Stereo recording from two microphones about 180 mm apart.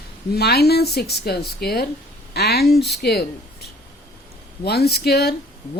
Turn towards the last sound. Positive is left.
turn(degrees=60)  # may be behind; listen again after turning